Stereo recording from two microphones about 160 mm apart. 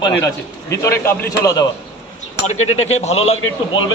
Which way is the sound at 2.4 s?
45° left (ahead or behind).